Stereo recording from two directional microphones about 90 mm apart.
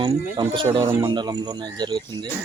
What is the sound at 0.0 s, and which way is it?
Speech, 50° right (ahead or behind).